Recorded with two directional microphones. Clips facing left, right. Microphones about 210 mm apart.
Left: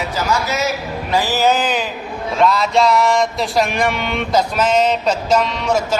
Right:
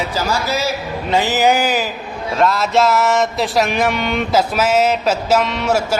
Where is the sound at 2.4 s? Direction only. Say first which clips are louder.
Even; centre (ahead or behind).